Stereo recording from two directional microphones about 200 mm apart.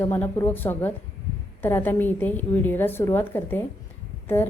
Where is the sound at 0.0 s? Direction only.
10° left (ahead or behind).